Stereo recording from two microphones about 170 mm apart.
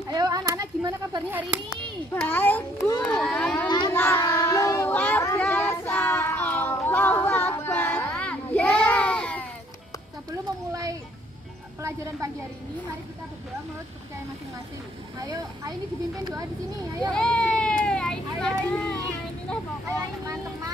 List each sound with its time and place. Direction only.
0.1 s a child's voice: 20° right (ahead or behind)
2.1 s a child's voice: 10° left (ahead or behind)
3.6 s child singing: 25° left (ahead or behind)
3.9 s child singing: 15° left (ahead or behind)
10.7 s a sound: 20° right (ahead or behind)
11.8 s a woman's voice: 20° right (ahead or behind)
15.1 s speech: 20° right (ahead or behind)
17.1 s a sound: 5° left (ahead or behind)